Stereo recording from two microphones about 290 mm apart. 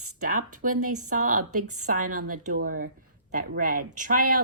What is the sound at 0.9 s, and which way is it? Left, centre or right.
Speech, right.